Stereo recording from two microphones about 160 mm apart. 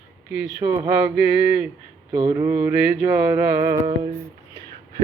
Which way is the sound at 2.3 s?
15° right (ahead or behind).